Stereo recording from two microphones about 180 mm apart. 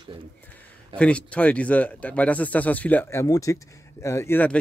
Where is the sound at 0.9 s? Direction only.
5° left (ahead or behind).